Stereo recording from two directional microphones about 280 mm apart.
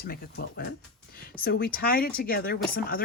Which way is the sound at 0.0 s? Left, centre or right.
Left.